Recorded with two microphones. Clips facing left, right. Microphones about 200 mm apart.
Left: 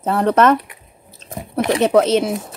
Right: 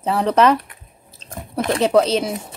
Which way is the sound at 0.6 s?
15° left (ahead or behind).